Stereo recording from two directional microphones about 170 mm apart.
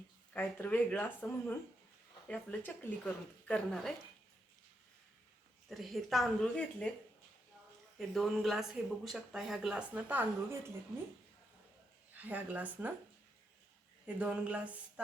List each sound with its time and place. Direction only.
0.3 s speech: 10° left (ahead or behind)
5.6 s speech: centre (ahead or behind)
7.9 s speech: centre (ahead or behind)
12.1 s speech: 10° right (ahead or behind)
14.2 s speech: 10° right (ahead or behind)